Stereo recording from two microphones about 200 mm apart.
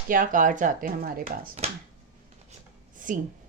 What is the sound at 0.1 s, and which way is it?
Speech, 40° right (ahead or behind).